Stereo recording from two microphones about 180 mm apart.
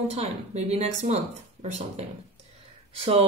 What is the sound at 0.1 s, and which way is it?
A woman's voice, 35° right (ahead or behind).